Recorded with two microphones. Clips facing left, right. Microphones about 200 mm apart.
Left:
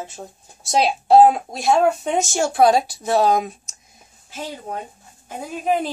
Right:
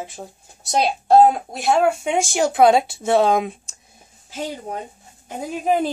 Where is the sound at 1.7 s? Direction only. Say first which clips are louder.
Even; 10° right (ahead or behind); by 3.8 s 25° right (ahead or behind).